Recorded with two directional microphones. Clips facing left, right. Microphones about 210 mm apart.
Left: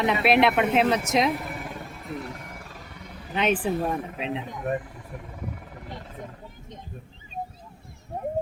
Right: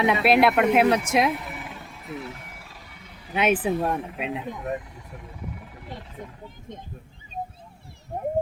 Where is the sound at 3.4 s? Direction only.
10° right (ahead or behind).